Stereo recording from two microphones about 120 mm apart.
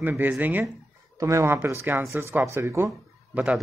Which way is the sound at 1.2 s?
25° right (ahead or behind).